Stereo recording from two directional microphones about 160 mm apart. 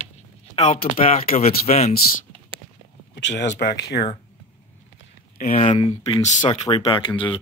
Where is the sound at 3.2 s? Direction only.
90° left.